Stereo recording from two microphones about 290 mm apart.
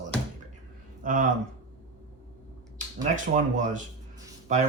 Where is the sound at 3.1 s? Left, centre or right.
Right.